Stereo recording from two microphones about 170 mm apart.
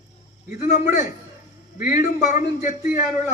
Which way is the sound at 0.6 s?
45° left (ahead or behind).